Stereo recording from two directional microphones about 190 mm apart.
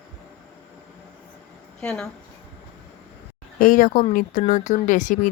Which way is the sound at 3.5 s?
45° left (ahead or behind).